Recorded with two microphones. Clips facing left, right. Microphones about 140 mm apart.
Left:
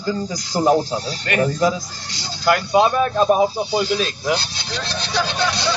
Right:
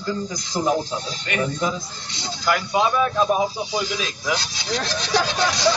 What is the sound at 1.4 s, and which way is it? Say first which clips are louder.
Speech: left 6 dB; 90° left.